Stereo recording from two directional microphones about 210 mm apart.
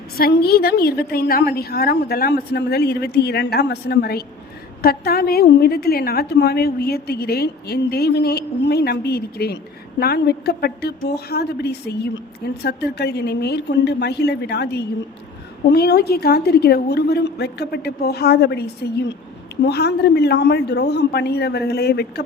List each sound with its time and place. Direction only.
0.2 s a woman's voice: 45° left (ahead or behind)